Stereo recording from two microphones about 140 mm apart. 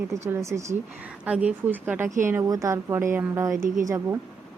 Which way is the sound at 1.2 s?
10° right (ahead or behind).